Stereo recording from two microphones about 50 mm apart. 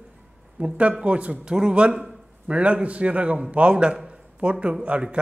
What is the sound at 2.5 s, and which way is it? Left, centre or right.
A man's voice, right.